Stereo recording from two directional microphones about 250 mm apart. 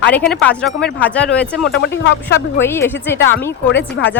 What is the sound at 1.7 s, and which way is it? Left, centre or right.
Speech, left.